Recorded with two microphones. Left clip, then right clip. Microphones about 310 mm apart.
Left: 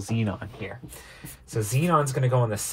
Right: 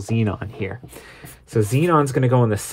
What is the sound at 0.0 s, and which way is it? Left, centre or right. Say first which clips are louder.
Speech: right 6 dB; right.